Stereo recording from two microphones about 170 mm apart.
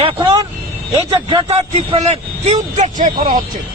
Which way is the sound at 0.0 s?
25° right (ahead or behind).